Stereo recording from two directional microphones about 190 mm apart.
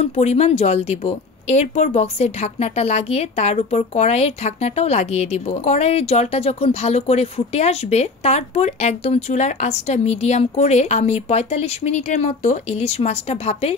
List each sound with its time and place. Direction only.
0.0 s a woman's voice: 35° left (ahead or behind)